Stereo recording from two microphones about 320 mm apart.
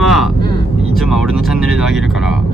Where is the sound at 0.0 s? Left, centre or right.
Centre.